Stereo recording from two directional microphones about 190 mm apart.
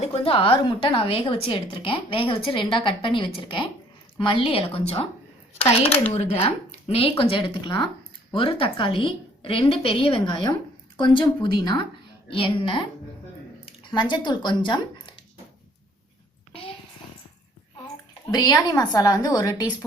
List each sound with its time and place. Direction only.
0.0 s a woman's voice: 30° left (ahead or behind)
13.9 s a woman's voice: 25° left (ahead or behind)
16.5 s a sound: 30° left (ahead or behind)
18.3 s a woman's voice: 20° left (ahead or behind)